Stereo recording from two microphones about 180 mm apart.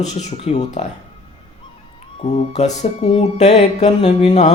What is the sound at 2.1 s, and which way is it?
Music, 35° left (ahead or behind).